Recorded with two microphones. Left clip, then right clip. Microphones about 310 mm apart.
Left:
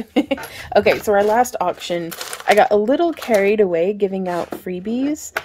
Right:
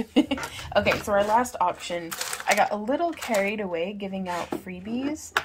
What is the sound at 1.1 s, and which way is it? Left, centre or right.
Speech, left.